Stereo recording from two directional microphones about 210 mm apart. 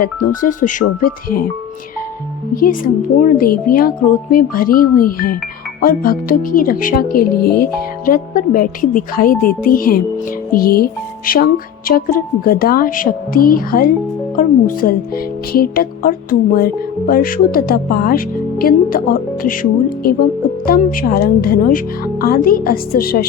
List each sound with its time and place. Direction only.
0.0 s speech: 40° left (ahead or behind)
2.6 s speech: 40° left (ahead or behind)
20.7 s speech: 45° left (ahead or behind)